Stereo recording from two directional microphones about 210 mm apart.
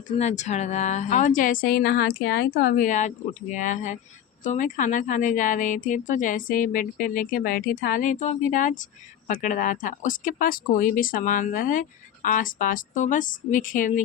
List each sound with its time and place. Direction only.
0.2 s a woman's voice: 35° left (ahead or behind)